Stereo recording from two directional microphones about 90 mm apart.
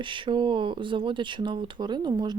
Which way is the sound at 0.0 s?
65° right (ahead or behind).